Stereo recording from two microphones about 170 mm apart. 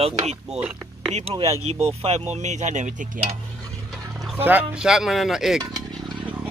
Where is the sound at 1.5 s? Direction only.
40° right (ahead or behind).